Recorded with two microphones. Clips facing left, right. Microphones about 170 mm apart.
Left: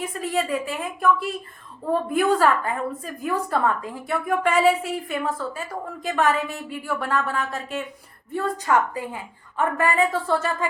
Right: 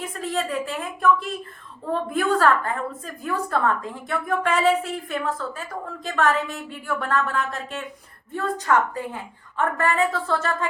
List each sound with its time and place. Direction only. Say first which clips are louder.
0.1 s a woman's voice: even; 10° left (ahead or behind)
3.5 s a woman's voice: even; 10° left (ahead or behind)